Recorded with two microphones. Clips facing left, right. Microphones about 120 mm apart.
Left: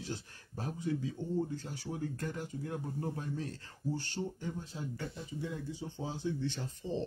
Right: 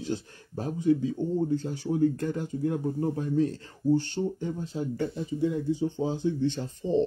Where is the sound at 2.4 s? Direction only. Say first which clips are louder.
Right 11 dB; 25° right (ahead or behind).